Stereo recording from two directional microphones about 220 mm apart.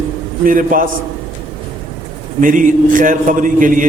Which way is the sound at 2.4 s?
35° right (ahead or behind).